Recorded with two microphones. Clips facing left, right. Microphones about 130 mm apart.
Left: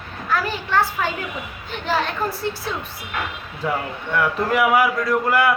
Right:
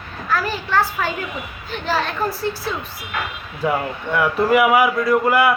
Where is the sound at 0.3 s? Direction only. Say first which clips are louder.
Right 1 dB; 20° left (ahead or behind).